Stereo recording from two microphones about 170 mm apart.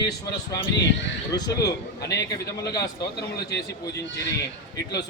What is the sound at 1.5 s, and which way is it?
A man's voice, 20° left (ahead or behind).